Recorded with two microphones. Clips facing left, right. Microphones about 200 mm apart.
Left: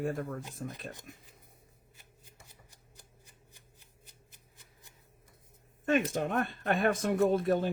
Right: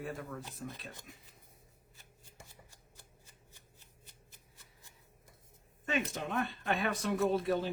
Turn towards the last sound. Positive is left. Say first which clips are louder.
# left 4 dB
turn(degrees=50)  # may be behind; listen again after turning